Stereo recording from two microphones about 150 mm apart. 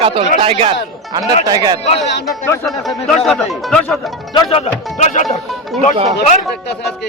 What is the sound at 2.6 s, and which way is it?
Speech, centre (ahead or behind).